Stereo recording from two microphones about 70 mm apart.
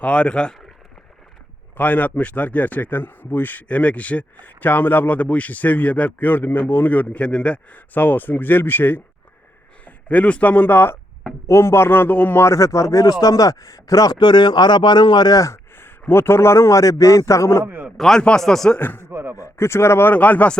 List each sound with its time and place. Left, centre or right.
0.0 s speech: centre
1.7 s speech: left
10.1 s speech: centre
12.4 s a man's voice: left
15.8 s a man's voice: left
17.9 s speech: centre
18.8 s speech: left
19.1 s speech: right
19.4 s speech: left
20.1 s speech: left